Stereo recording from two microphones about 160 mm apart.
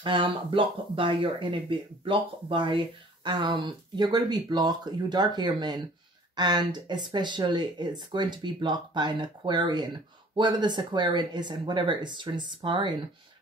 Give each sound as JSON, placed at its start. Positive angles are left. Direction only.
{"t": 0.0, "sound": "speech", "side_deg": -30}